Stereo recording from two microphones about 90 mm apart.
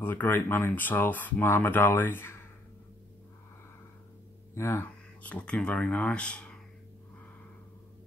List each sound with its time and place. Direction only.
0.0 s speech: 20° left (ahead or behind)
4.6 s speech: 25° left (ahead or behind)
4.8 s speech: 15° left (ahead or behind)